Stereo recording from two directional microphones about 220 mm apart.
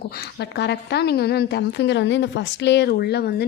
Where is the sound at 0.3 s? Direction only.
50° left (ahead or behind).